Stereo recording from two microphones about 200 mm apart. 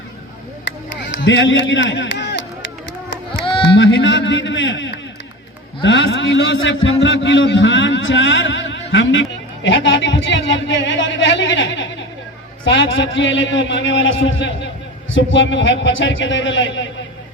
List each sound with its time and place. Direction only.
1.1 s a man's voice: 65° left (ahead or behind)
3.4 s music: 25° left (ahead or behind)
3.8 s a man's voice: 70° left (ahead or behind)